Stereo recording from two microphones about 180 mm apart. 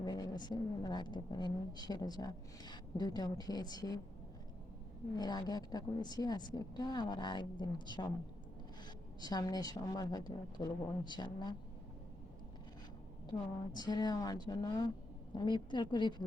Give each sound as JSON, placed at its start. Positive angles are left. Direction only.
{"t": 0.0, "sound": "a woman's voice", "side_deg": 20}
{"t": 5.1, "sound": "a woman's voice", "side_deg": 25}
{"t": 9.2, "sound": "a woman's voice", "side_deg": 20}
{"t": 13.7, "sound": "a woman's voice", "side_deg": 20}